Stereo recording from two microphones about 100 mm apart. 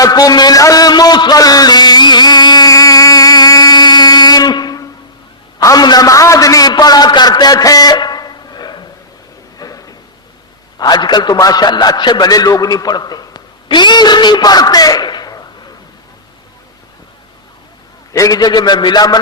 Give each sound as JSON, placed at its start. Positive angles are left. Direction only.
{"t": 0.0, "sound": "a sound", "side_deg": 40}
{"t": 10.8, "sound": "a man's voice", "side_deg": 45}
{"t": 18.1, "sound": "a man's voice", "side_deg": 35}